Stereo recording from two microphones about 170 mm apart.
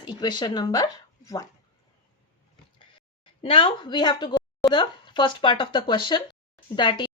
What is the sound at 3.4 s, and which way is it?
A woman's voice, 30° left (ahead or behind).